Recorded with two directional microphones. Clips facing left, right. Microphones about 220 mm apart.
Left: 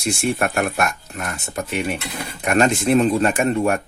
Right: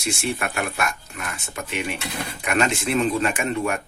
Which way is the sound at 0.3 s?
45° left (ahead or behind).